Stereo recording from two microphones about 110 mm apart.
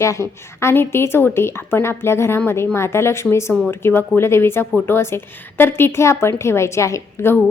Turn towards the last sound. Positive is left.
turn(degrees=25)  # may be behind; listen again after turning